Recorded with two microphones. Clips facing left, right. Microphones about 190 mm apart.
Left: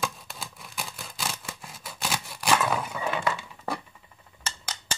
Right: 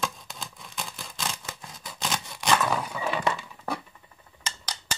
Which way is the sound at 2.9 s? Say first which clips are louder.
Right 1 dB; 5° right (ahead or behind).